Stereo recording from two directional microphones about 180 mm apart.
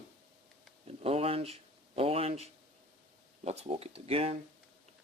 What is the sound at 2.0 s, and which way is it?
Speech, 35° right (ahead or behind).